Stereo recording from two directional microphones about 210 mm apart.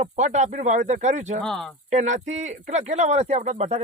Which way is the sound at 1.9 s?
35° right (ahead or behind).